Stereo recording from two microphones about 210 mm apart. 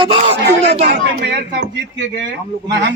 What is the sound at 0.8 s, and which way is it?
Speech, 50° right (ahead or behind).